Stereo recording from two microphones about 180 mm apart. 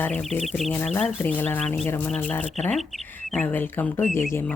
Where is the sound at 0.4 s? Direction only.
Centre (ahead or behind).